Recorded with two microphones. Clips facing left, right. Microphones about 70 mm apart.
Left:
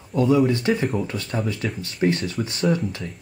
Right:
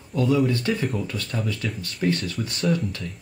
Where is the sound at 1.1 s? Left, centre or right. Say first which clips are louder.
Left 3 dB; centre.